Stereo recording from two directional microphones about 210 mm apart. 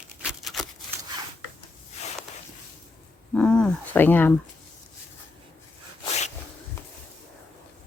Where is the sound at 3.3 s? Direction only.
5° left (ahead or behind).